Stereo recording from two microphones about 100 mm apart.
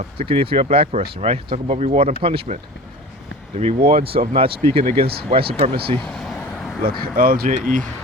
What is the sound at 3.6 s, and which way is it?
Speech, 90° right.